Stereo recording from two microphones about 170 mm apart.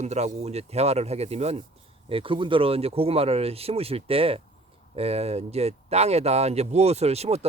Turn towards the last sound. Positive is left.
turn(degrees=-40)  # may be behind; listen again after turning